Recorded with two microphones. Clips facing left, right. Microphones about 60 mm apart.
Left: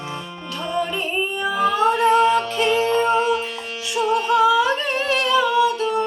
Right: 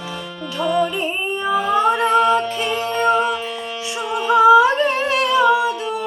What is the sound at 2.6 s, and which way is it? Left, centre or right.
Music, centre.